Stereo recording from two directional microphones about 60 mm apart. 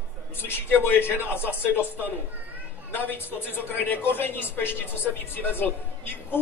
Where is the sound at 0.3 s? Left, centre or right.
Left.